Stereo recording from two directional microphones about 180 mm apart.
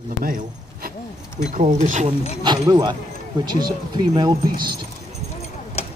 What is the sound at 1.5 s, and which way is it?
Speech, 40° right (ahead or behind).